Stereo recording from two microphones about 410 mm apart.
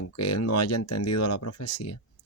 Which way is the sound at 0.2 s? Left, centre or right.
Left.